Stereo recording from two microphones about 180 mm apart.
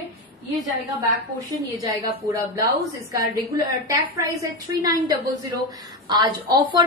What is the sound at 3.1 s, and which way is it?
A woman's voice, 20° right (ahead or behind).